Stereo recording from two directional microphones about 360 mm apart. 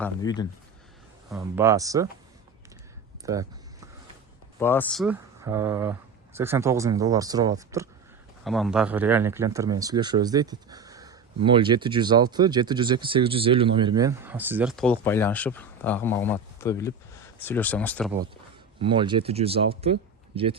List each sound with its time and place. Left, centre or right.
0.0 s speech: centre
1.3 s speech: centre
3.2 s speech: centre
4.6 s speech: centre
18.8 s speech: centre